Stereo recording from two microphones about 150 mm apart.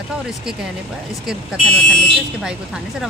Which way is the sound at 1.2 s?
Centre (ahead or behind).